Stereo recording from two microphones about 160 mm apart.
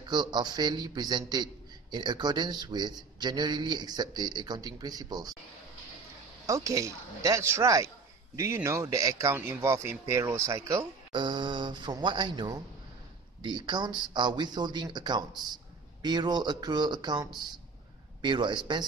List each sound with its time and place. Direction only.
0.1 s a man's voice: 25° right (ahead or behind)
6.4 s a man's voice: 20° right (ahead or behind)
11.1 s a man's voice: 30° right (ahead or behind)